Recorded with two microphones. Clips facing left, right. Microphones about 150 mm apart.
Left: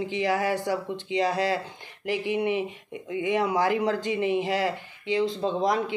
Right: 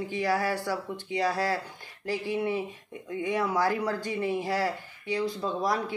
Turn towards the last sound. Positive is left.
turn(degrees=20)  # may be behind; listen again after turning